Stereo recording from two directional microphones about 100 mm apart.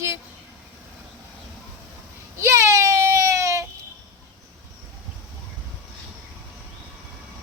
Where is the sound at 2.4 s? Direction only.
30° right (ahead or behind).